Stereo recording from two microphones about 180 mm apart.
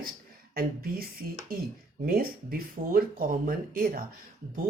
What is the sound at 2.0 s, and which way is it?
Speech, 55° right (ahead or behind).